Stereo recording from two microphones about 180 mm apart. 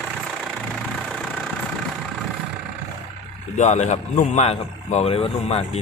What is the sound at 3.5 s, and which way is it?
A man's voice, 40° left (ahead or behind).